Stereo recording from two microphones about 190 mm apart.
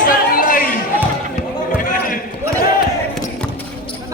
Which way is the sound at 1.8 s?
45° left (ahead or behind).